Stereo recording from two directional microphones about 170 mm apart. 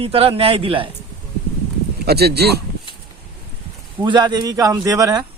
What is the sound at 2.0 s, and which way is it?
Speech, 70° right (ahead or behind).